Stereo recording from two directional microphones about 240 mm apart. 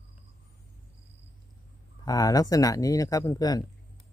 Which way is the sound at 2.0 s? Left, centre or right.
Centre.